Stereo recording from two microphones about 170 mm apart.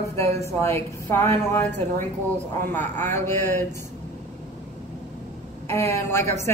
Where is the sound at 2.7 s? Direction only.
10° left (ahead or behind).